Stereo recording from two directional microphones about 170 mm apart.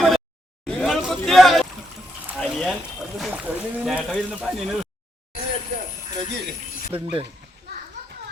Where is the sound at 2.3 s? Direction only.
Centre (ahead or behind).